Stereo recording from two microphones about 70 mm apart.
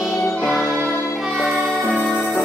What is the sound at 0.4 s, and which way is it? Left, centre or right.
Music, centre.